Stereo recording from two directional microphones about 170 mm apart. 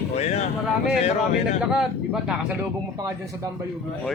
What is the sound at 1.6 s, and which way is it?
Speech, 5° right (ahead or behind).